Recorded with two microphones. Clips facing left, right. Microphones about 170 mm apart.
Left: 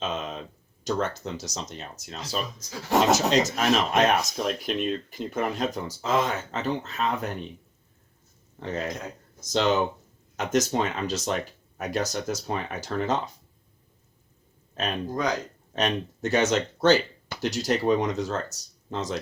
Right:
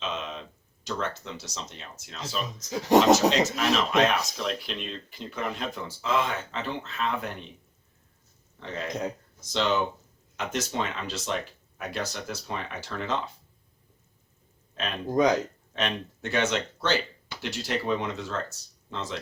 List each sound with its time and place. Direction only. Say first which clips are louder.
0.0 s a sound: left 3 dB; 45° left (ahead or behind)
0.9 s speech: left 5 dB; 45° left (ahead or behind)
8.5 s speech: left 2 dB; 45° left (ahead or behind)
14.8 s speech: right 4 dB; 40° left (ahead or behind)